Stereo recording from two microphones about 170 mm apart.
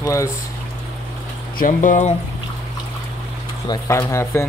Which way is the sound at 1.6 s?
50° left (ahead or behind).